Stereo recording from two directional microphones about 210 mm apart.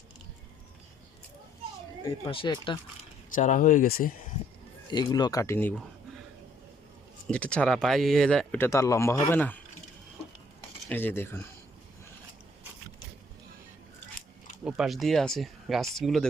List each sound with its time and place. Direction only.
2.0 s speech: 25° left (ahead or behind)
3.3 s speech: 40° left (ahead or behind)
4.9 s speech: 20° left (ahead or behind)
7.3 s speech: 5° left (ahead or behind)
10.8 s speech: 10° left (ahead or behind)
14.6 s speech: 5° right (ahead or behind)